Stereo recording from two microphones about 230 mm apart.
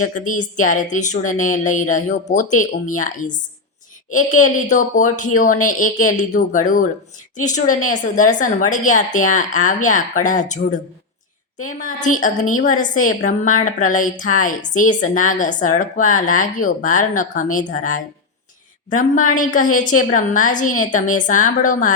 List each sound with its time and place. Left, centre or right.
0.0 s a woman's voice: left